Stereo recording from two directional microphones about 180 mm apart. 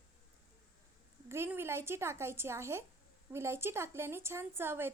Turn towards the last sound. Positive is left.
turn(degrees=-15)  # may be behind; listen again after turning